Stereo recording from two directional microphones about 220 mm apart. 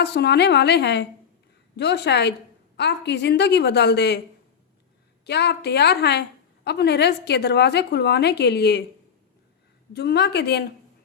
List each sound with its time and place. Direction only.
0.0 s a woman's voice: 50° left (ahead or behind)
5.2 s a woman's voice: 50° left (ahead or behind)
9.9 s a woman's voice: 50° left (ahead or behind)